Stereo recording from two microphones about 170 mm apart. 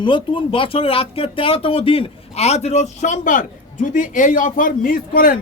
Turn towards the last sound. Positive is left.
turn(degrees=60)  # may be behind; listen again after turning